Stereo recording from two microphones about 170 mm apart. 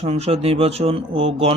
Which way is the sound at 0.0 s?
40° right (ahead or behind).